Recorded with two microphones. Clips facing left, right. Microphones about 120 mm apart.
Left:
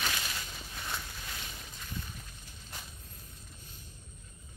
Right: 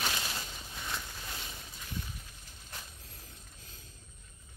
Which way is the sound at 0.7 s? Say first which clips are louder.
Even; 5° left (ahead or behind).